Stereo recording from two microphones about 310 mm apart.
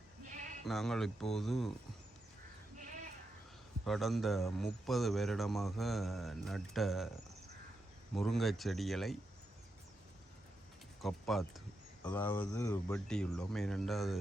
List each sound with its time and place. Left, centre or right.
0.6 s a man's voice: centre
3.8 s a man's voice: centre
8.1 s a man's voice: centre
11.0 s a man's voice: centre